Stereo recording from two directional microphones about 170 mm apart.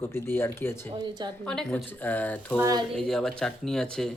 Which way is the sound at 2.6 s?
20° right (ahead or behind).